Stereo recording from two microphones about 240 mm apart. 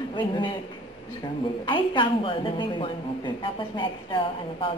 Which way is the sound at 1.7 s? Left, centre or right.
Left.